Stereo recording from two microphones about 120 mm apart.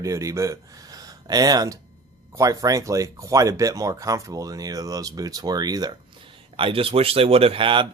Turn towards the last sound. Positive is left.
turn(degrees=-45)  # may be behind; listen again after turning